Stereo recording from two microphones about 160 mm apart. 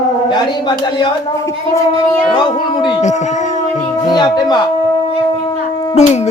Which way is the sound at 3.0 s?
50° left (ahead or behind).